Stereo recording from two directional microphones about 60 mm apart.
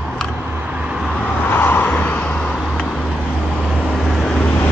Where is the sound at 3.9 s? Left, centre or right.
Centre.